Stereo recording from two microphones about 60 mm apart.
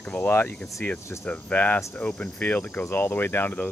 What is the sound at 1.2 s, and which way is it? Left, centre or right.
Speech, left.